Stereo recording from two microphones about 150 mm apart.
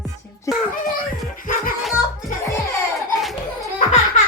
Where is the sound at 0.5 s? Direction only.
20° left (ahead or behind).